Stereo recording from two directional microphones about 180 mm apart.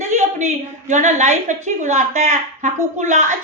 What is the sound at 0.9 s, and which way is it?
A woman's voice, 40° right (ahead or behind).